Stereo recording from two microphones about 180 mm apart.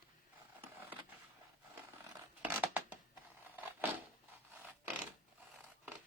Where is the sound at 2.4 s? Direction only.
10° right (ahead or behind).